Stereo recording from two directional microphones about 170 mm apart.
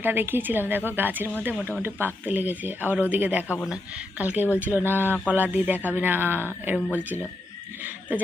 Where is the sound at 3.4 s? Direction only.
15° left (ahead or behind).